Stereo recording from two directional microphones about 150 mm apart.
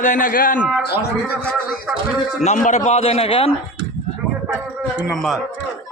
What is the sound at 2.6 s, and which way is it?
Speech, 50° left (ahead or behind).